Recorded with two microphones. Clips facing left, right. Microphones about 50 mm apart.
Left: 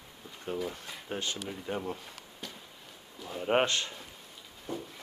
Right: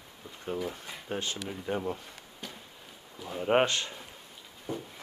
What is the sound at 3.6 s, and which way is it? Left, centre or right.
Speech, right.